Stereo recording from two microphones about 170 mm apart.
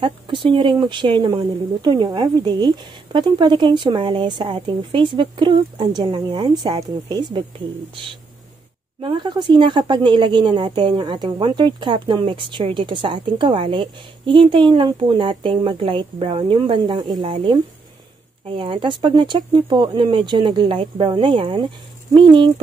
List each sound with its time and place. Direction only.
0.0 s speech: 30° right (ahead or behind)
9.0 s speech: 30° right (ahead or behind)